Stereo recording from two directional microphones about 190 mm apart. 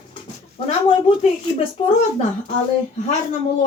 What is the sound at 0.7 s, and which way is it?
Speech, 30° left (ahead or behind).